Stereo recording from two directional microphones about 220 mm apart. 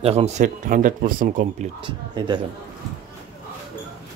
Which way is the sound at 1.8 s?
20° right (ahead or behind).